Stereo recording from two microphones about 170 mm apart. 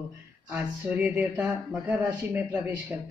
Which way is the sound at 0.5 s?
10° right (ahead or behind).